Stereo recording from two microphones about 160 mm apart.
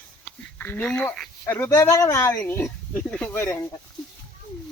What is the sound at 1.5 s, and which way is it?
Speech, 15° left (ahead or behind).